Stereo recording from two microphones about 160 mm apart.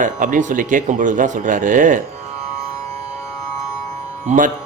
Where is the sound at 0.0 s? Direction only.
50° right (ahead or behind).